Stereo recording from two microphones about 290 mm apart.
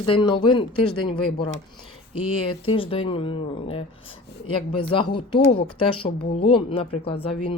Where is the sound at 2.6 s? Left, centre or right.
Centre.